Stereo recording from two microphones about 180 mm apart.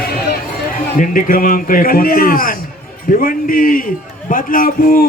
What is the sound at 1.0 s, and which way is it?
A man's voice, 50° left (ahead or behind).